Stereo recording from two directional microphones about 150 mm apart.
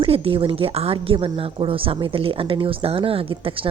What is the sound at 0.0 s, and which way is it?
Speech, 35° right (ahead or behind).